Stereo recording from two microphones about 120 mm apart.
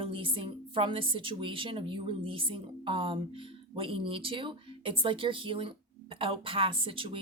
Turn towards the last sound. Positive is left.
turn(degrees=-50)  # may be behind; listen again after turning